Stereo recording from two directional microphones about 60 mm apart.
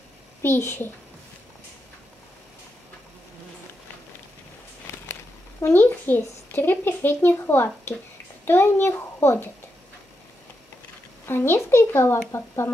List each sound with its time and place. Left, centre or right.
0.4 s a child's voice: left
4.9 s a sound: left
5.7 s a woman's voice: left
11.2 s a child's voice: left